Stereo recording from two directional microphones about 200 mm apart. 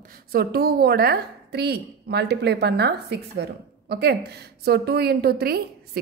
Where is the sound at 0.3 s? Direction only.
50° right (ahead or behind).